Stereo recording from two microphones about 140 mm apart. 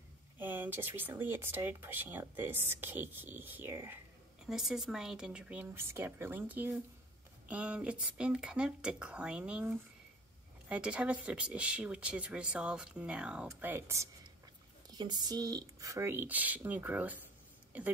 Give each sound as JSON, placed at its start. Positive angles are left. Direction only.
{"t": 0.4, "sound": "speech", "side_deg": -15}
{"t": 4.5, "sound": "speech", "side_deg": 0}
{"t": 14.9, "sound": "speech", "side_deg": -30}